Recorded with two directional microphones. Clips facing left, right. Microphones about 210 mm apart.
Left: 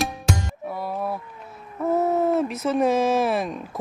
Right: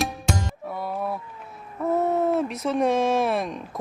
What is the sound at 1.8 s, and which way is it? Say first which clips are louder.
Speech: left 1 dB; centre (ahead or behind).